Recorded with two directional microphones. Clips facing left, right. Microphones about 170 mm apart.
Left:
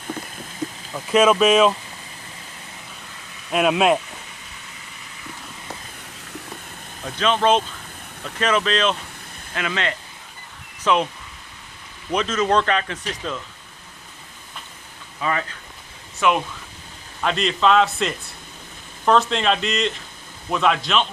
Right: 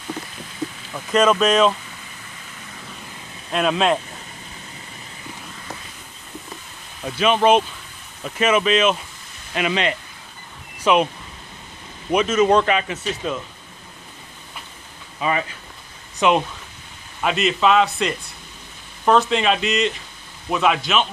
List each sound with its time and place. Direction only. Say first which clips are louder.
0.9 s speech: left 1 dB; 5° left (ahead or behind)
3.5 s speech: left 2 dB; 10° left (ahead or behind)
7.2 s speech: right 3 dB; 15° right (ahead or behind)
12.1 s speech: right 4 dB; 10° right (ahead or behind)
15.1 s speech: right 2 dB; 15° right (ahead or behind)
17.2 s a man's voice: right 1 dB; 5° right (ahead or behind)